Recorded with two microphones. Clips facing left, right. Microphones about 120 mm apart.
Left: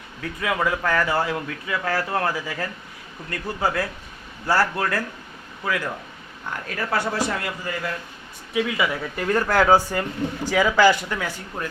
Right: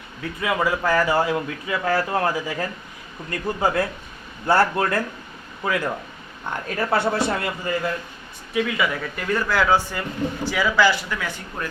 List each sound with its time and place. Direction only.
0.2 s a man's voice: 5° right (ahead or behind); by 7.7 s 25° right (ahead or behind)
8.5 s speech: 15° left (ahead or behind)
9.1 s speech: 35° left (ahead or behind)